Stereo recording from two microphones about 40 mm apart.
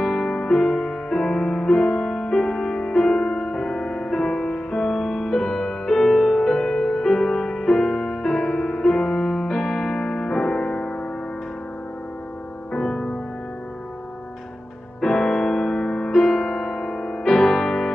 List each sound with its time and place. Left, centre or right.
0.0 s music: centre
12.7 s music: centre
15.0 s music: centre